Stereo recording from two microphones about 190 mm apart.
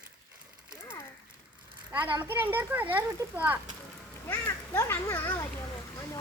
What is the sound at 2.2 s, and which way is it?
A child's voice, 10° right (ahead or behind).